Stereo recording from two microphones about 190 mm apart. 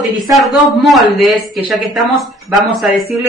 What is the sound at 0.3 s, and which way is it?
Speech, centre (ahead or behind).